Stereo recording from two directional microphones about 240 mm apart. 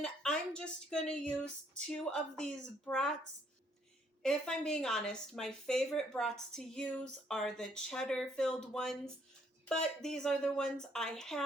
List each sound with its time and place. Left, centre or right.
0.0 s speech: centre
4.2 s speech: centre